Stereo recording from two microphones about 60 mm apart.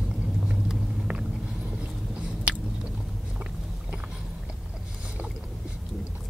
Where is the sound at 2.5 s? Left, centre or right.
Right.